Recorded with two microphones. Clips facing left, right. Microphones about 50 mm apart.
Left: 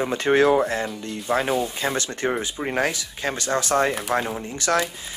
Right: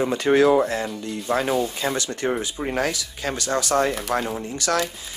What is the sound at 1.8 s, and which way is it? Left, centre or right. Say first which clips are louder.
Speech: even; left.